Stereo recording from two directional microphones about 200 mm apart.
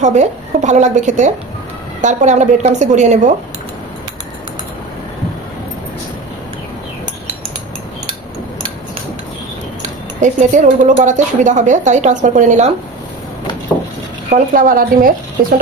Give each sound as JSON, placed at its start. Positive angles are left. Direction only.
{"t": 0.0, "sound": "a woman's voice", "side_deg": -35}
{"t": 10.2, "sound": "a woman's voice", "side_deg": -40}
{"t": 14.3, "sound": "speech", "side_deg": -45}